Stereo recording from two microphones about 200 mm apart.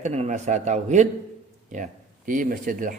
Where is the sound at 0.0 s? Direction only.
35° right (ahead or behind).